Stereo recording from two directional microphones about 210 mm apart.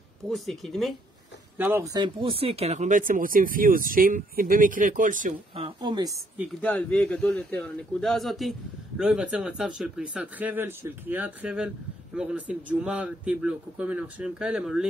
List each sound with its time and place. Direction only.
0.3 s a man's voice: centre (ahead or behind)
1.6 s speech: 10° right (ahead or behind)
2.2 s speech: 25° right (ahead or behind)
5.5 s speech: 25° right (ahead or behind)
6.6 s a man's voice: 5° left (ahead or behind)